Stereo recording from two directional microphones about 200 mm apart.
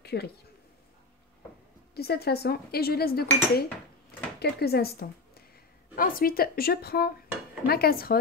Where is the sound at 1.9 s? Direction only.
50° left (ahead or behind).